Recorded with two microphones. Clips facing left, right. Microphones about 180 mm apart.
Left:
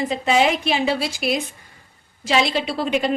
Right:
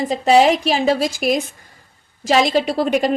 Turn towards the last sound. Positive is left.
turn(degrees=-40)  # may be behind; listen again after turning